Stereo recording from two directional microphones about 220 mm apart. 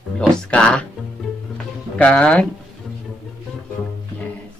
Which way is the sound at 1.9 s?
5° left (ahead or behind).